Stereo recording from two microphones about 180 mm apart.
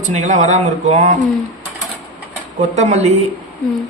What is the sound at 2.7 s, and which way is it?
Speech, 40° right (ahead or behind).